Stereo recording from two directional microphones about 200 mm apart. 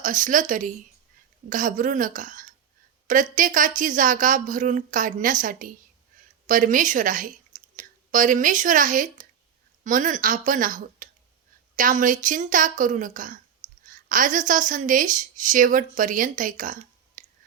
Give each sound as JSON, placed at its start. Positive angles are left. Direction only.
{"t": 0.0, "sound": "a woman's voice", "side_deg": -40}